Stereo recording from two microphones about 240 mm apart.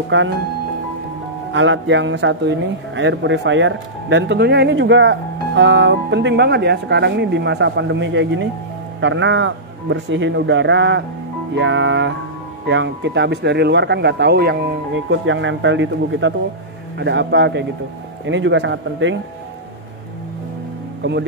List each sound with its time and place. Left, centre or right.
0.1 s a man's voice: right
1.5 s a man's voice: right
21.0 s speech: right